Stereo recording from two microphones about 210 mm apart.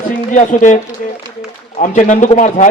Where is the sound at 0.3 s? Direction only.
35° left (ahead or behind).